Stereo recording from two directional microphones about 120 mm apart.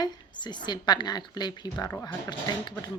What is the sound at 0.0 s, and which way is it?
Speech, 40° left (ahead or behind).